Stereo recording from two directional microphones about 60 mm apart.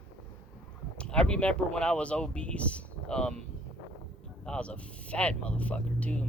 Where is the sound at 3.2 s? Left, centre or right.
Centre.